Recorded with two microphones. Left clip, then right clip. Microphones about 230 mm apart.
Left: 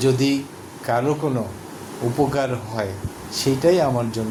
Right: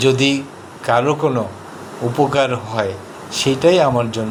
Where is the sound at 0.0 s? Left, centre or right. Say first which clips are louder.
Right 5 dB; centre.